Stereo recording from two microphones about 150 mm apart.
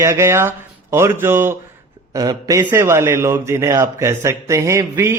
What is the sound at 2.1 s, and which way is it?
Speech, 25° right (ahead or behind).